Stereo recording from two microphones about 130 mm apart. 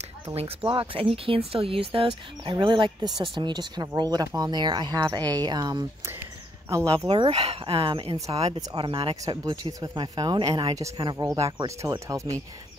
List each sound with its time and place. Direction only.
0.7 s speech: 45° right (ahead or behind)
7.0 s speech: 30° right (ahead or behind)
7.2 s speech: 50° right (ahead or behind)
8.5 s speech: 35° right (ahead or behind)
9.1 s speech: 25° right (ahead or behind)